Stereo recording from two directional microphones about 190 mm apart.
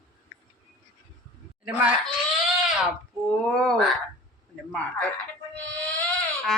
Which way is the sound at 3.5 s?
5° left (ahead or behind).